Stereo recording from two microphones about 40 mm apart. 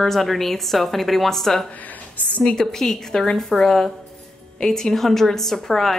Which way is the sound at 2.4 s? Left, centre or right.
Centre.